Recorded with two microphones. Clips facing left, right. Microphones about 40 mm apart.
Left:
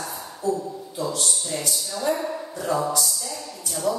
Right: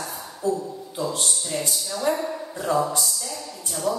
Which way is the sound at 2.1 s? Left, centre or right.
Centre.